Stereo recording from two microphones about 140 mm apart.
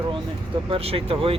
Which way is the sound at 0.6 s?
45° right (ahead or behind).